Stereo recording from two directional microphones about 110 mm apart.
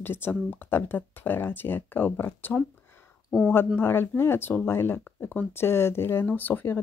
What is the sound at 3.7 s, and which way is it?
Speech, 20° left (ahead or behind).